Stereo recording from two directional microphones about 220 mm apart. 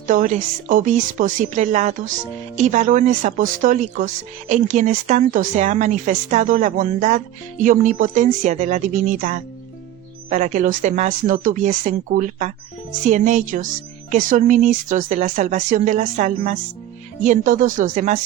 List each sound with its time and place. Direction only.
0.1 s speech: 35° right (ahead or behind)